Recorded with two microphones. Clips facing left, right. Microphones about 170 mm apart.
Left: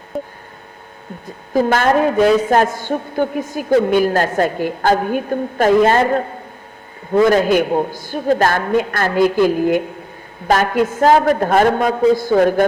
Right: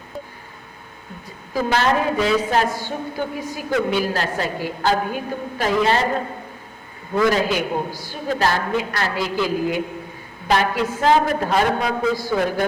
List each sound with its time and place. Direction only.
1.5 s a woman's voice: 50° left (ahead or behind)
7.3 s a woman's voice: 50° left (ahead or behind)